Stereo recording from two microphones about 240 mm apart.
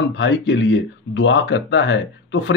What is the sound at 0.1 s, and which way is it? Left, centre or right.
Speech, left.